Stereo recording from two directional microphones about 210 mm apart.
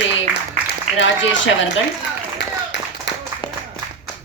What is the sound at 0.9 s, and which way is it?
Speech, 60° left (ahead or behind).